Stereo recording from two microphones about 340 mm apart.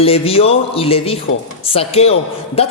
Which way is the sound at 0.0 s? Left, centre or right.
Centre.